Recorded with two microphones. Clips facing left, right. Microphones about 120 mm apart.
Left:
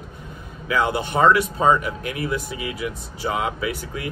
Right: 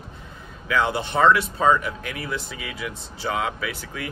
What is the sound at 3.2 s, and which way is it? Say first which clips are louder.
Speech: left 1 dB; 10° left (ahead or behind).